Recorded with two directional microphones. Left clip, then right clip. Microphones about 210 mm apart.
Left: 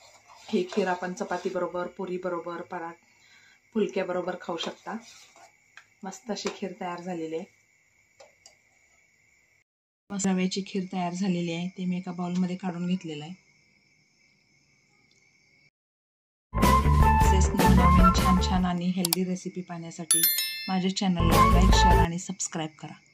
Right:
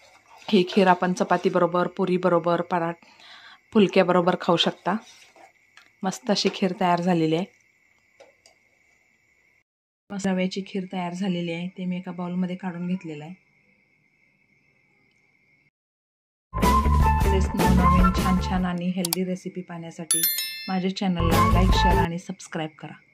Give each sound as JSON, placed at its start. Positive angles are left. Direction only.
{"t": 0.5, "sound": "speech", "side_deg": -50}
{"t": 5.9, "sound": "speech", "side_deg": -50}
{"t": 10.0, "sound": "speech", "side_deg": 0}
{"t": 16.5, "sound": "music", "side_deg": 0}